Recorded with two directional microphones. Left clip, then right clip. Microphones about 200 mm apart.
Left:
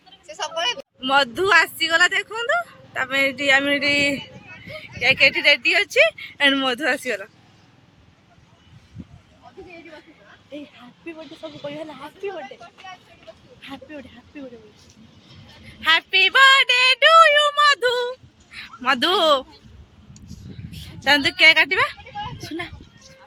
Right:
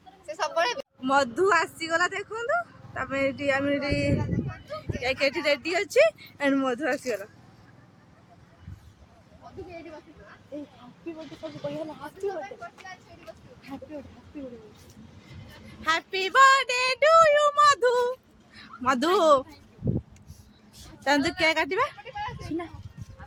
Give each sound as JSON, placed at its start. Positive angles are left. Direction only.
{"t": 0.3, "sound": "vehicle", "side_deg": -5}
{"t": 1.9, "sound": "speech", "side_deg": 15}
{"t": 4.8, "sound": "speech", "side_deg": -10}
{"t": 6.6, "sound": "speech", "side_deg": 10}
{"t": 12.3, "sound": "speech", "side_deg": 25}
{"t": 13.7, "sound": "speech", "side_deg": 10}
{"t": 15.8, "sound": "female singing", "side_deg": -5}
{"t": 18.8, "sound": "speech", "side_deg": -10}
{"t": 20.8, "sound": "a woman's voice", "side_deg": -5}